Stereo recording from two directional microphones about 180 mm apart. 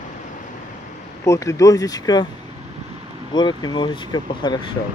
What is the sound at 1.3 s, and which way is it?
Speech, 15° left (ahead or behind).